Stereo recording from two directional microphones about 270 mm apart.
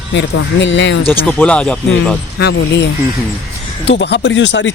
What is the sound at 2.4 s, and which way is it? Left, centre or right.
Speech, left.